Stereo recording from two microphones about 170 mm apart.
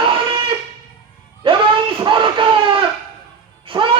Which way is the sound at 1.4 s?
30° right (ahead or behind).